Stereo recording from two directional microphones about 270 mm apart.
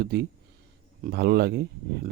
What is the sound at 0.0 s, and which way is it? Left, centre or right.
Speech, right.